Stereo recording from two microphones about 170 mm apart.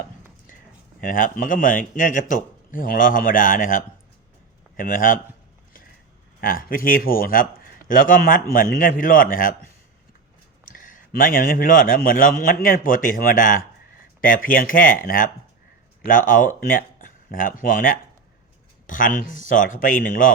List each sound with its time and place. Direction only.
1.0 s a man's voice: 55° left (ahead or behind)
6.4 s a man's voice: 55° left (ahead or behind)
10.7 s a man's voice: 50° left (ahead or behind)